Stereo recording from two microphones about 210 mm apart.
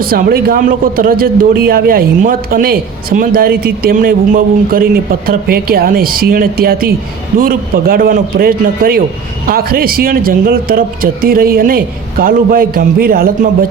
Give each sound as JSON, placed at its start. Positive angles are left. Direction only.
{"t": 0.0, "sound": "a man's voice", "side_deg": -45}